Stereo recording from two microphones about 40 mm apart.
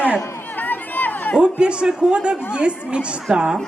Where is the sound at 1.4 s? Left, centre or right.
Right.